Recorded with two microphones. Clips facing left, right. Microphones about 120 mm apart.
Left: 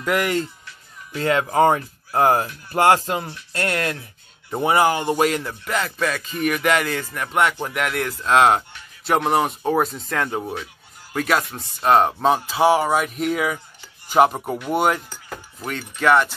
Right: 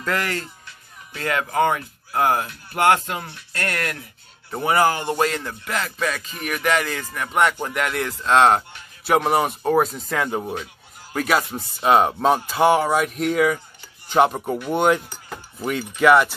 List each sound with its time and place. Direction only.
0.0 s chopping: 15° left (ahead or behind)
1.1 s speech: 25° left (ahead or behind); by 13.6 s 5° left (ahead or behind)
14.0 s chopping: 5° left (ahead or behind)
14.7 s cutlery: 5° left (ahead or behind)
16.0 s speech: 5° right (ahead or behind)